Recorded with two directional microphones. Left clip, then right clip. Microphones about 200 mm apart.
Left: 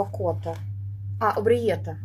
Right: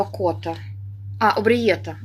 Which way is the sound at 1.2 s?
15° right (ahead or behind).